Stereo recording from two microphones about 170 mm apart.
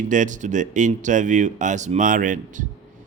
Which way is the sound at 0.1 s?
50° right (ahead or behind).